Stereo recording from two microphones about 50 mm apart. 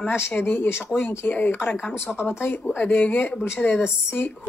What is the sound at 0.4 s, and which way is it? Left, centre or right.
Speech, left.